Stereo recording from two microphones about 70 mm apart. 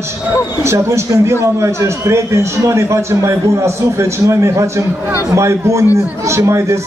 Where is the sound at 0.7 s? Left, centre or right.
Right.